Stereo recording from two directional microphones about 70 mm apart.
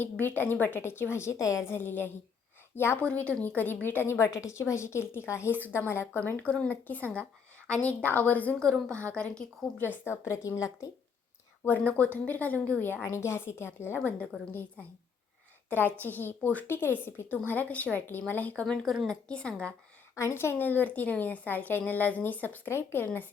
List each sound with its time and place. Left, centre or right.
0.0 s a woman's voice: left
1.6 s a woman's voice: left
3.0 s a woman's voice: centre
4.0 s a woman's voice: left
6.3 s a woman's voice: centre
8.5 s a woman's voice: centre
9.7 s a woman's voice: left
11.6 s a woman's voice: left
15.7 s a woman's voice: left
18.6 s a woman's voice: centre
20.1 s a woman's voice: left